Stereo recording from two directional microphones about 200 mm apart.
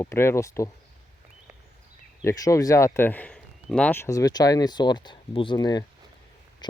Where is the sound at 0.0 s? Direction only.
15° left (ahead or behind).